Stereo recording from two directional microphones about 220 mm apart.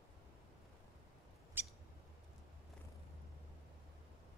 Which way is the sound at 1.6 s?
10° right (ahead or behind).